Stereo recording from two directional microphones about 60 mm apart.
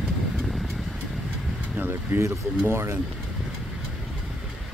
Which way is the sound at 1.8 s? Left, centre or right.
Right.